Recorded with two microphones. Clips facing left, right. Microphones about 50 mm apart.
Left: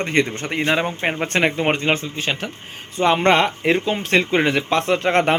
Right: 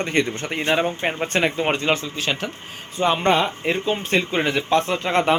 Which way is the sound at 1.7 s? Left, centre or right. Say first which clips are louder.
Left 1 dB; left.